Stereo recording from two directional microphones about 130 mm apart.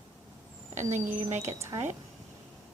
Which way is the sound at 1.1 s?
60° right (ahead or behind).